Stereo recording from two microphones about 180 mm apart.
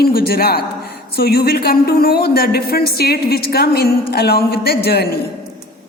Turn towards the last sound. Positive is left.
turn(degrees=60)  # may be behind; listen again after turning